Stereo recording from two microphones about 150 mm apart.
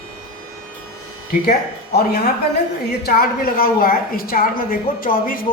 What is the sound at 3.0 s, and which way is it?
A woman's voice, 85° left.